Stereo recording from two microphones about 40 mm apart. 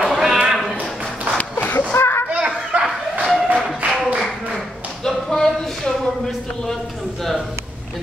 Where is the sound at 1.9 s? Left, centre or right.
Left.